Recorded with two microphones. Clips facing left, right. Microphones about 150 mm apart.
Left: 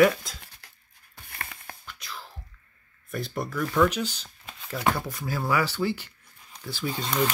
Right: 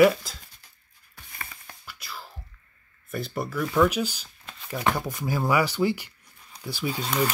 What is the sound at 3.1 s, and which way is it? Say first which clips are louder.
Speech: right 1 dB; centre (ahead or behind).